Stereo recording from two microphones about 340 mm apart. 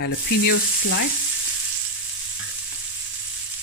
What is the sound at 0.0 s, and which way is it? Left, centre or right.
Frying, left.